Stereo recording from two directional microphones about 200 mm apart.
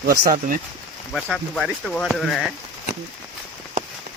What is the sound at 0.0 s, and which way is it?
Speech, 45° right (ahead or behind).